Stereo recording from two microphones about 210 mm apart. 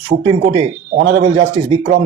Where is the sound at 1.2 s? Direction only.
30° right (ahead or behind).